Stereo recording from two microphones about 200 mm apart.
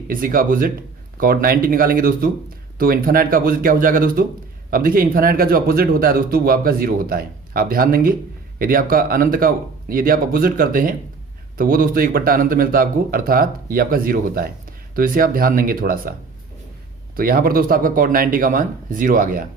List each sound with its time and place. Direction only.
0.1 s speech: 45° right (ahead or behind)
17.2 s speech: 45° right (ahead or behind)